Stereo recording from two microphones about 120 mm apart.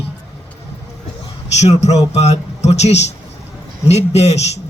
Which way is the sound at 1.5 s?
65° left (ahead or behind).